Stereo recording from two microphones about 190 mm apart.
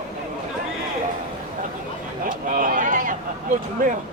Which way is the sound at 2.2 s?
45° right (ahead or behind).